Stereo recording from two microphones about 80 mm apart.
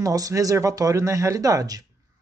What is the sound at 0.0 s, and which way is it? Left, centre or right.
Speech, right.